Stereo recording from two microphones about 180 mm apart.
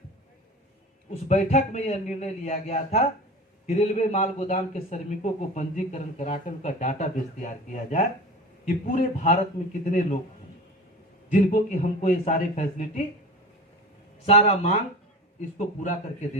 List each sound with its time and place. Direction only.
1.3 s a man's voice: 40° left (ahead or behind)
11.3 s a man's voice: 45° left (ahead or behind)
14.3 s a man's voice: 40° left (ahead or behind)